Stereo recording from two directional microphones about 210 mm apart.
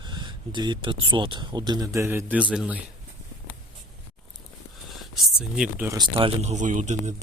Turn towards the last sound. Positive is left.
turn(degrees=-35)  # may be behind; listen again after turning